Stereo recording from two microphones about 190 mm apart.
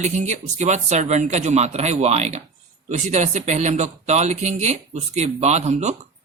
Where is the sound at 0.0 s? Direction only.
40° right (ahead or behind).